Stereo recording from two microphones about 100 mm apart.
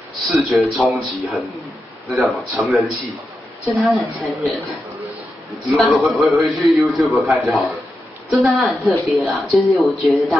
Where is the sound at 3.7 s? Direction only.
Centre (ahead or behind).